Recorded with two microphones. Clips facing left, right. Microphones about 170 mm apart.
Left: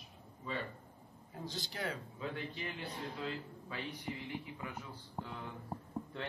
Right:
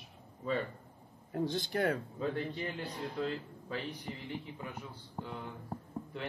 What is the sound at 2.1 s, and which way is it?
Speech, 40° right (ahead or behind).